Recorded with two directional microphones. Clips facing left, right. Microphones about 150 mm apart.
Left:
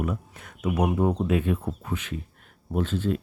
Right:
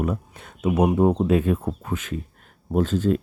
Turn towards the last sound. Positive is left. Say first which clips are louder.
# right 5 dB
turn(degrees=-40)  # may be behind; listen again after turning